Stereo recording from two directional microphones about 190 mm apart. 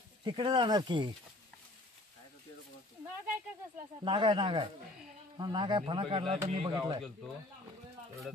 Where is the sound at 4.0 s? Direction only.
25° right (ahead or behind).